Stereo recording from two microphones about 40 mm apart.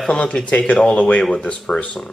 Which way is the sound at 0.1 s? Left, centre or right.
Left.